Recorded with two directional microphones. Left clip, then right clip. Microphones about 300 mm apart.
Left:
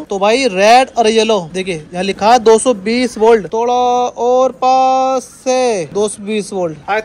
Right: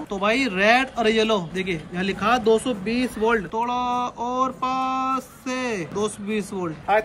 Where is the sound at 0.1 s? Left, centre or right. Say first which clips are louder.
Left 10 dB; centre.